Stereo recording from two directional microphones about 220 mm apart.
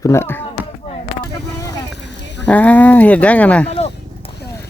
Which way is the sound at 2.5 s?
5° left (ahead or behind).